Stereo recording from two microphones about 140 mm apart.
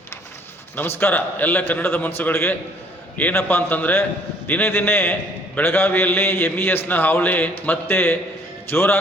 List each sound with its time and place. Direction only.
0.8 s a man's voice: 15° left (ahead or behind)